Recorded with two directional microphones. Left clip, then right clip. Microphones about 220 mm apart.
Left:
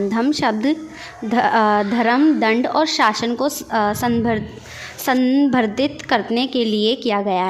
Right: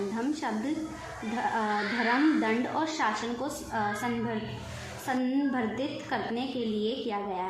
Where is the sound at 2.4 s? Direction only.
50° left (ahead or behind).